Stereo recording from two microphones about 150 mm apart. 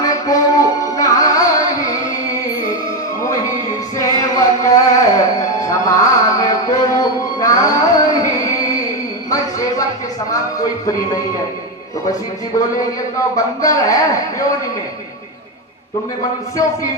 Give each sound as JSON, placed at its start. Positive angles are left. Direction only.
{"t": 0.0, "sound": "music", "side_deg": 25}
{"t": 3.9, "sound": "music", "side_deg": 25}
{"t": 9.3, "sound": "a sound", "side_deg": 20}
{"t": 10.2, "sound": "music", "side_deg": 25}
{"t": 12.5, "sound": "a man's voice", "side_deg": 25}
{"t": 16.6, "sound": "a man's voice", "side_deg": 20}